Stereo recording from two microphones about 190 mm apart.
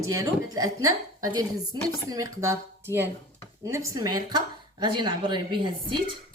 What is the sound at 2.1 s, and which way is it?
A woman's voice, 15° right (ahead or behind).